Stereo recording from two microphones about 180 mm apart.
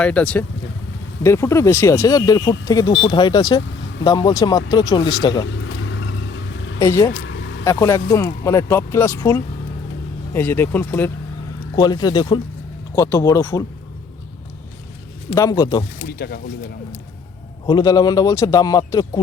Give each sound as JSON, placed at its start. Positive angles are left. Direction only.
{"t": 0.0, "sound": "speech", "side_deg": 5}
{"t": 5.5, "sound": "vehicle", "side_deg": 90}
{"t": 6.7, "sound": "speech", "side_deg": 15}
{"t": 11.8, "sound": "speech", "side_deg": 25}
{"t": 15.4, "sound": "speech", "side_deg": 20}
{"t": 16.1, "sound": "speech", "side_deg": 60}
{"t": 17.7, "sound": "speech", "side_deg": 25}